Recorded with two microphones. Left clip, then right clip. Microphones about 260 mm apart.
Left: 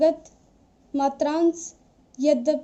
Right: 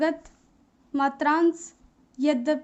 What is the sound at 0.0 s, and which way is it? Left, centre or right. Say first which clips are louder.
A woman's voice: left 6 dB; centre.